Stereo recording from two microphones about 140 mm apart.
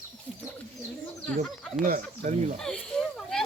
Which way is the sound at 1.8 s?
70° right (ahead or behind).